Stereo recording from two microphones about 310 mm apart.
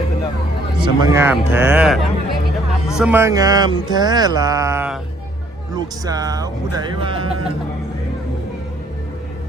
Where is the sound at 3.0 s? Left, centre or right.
Centre.